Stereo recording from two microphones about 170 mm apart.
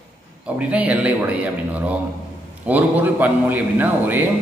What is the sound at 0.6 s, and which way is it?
A man's voice, 10° right (ahead or behind).